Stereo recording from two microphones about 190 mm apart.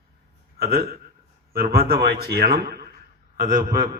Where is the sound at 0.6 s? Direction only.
55° right (ahead or behind).